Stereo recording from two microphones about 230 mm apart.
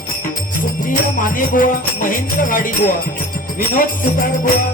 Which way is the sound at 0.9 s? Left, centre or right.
Left.